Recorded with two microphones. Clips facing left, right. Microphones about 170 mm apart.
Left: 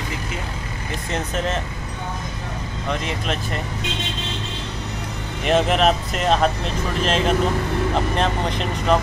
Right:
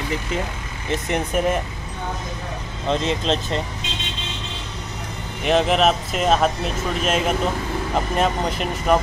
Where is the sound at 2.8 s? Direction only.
25° right (ahead or behind).